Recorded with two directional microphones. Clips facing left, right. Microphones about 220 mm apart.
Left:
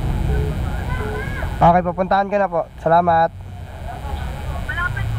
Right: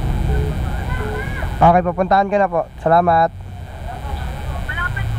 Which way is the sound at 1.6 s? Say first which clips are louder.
Right 2 dB; 20° right (ahead or behind).